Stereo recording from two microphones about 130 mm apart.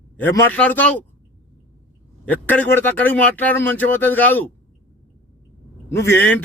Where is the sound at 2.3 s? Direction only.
15° left (ahead or behind).